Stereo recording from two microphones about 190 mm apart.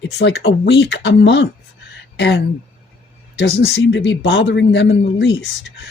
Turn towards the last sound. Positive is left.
turn(degrees=75)  # may be behind; listen again after turning